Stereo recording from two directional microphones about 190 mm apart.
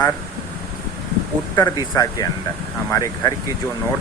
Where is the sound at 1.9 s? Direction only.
15° left (ahead or behind).